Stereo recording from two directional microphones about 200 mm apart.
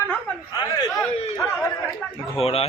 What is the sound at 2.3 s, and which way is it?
Speech, 30° left (ahead or behind).